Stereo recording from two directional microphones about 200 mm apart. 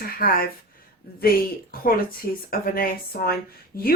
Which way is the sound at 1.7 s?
50° left (ahead or behind).